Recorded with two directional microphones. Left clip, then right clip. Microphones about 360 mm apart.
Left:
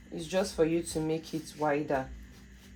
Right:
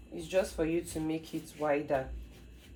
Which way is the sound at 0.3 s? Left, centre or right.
Left.